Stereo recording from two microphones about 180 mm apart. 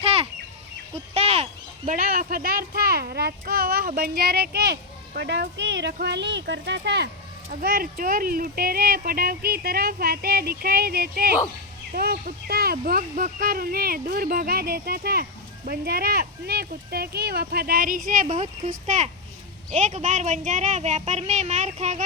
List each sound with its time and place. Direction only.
1.1 s a sound: 30° right (ahead or behind)
1.9 s speech: 55° right (ahead or behind); by 7.1 s 70° right (ahead or behind)
7.6 s speech: 55° right (ahead or behind)